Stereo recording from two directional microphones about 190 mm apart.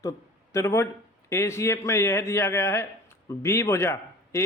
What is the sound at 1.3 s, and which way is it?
A man's voice, 15° left (ahead or behind).